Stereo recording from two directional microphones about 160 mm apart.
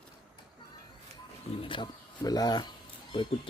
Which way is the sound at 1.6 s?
30° left (ahead or behind).